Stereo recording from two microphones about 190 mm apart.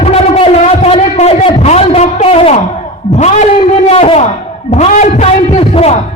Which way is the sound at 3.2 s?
35° left (ahead or behind).